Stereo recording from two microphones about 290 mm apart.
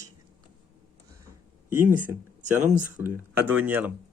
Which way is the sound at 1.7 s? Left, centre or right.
Centre.